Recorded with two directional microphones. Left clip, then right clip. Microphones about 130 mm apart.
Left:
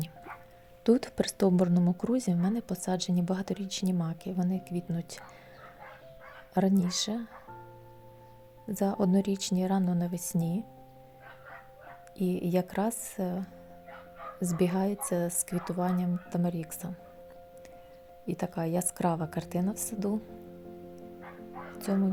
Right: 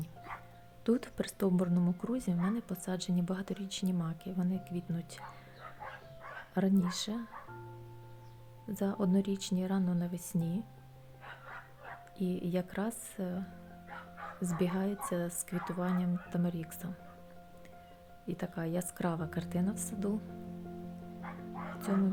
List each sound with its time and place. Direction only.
0.9 s a woman's voice: 30° left (ahead or behind)
6.5 s a woman's voice: 25° left (ahead or behind)
8.7 s a woman's voice: 25° left (ahead or behind)
12.1 s a woman's voice: 25° left (ahead or behind)
14.5 s a woman's voice: 25° left (ahead or behind)
18.3 s a woman's voice: 25° left (ahead or behind)